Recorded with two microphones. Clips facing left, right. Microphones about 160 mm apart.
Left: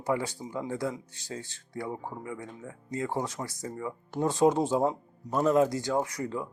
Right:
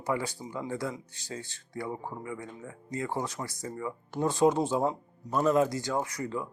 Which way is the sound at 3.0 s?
20° left (ahead or behind).